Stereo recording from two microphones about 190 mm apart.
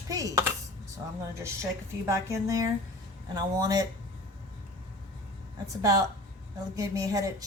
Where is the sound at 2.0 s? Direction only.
15° right (ahead or behind).